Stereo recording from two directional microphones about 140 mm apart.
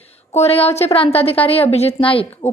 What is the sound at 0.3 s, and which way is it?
A woman's voice, 45° left (ahead or behind).